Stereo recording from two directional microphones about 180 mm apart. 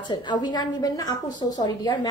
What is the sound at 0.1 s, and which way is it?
A woman's voice, 25° left (ahead or behind).